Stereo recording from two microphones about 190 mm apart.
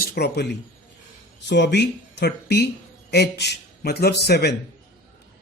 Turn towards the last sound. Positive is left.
turn(degrees=60)  # may be behind; listen again after turning